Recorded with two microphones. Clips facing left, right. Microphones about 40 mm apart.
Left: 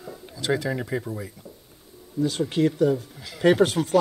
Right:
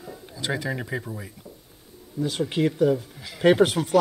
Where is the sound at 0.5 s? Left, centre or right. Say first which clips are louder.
Left 3 dB; centre.